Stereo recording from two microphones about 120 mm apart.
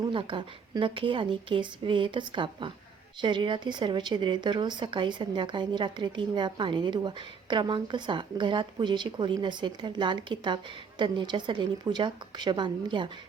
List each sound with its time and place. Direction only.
0.1 s a woman's voice: 45° right (ahead or behind)